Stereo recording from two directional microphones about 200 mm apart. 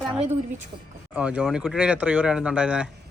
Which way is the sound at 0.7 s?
25° right (ahead or behind).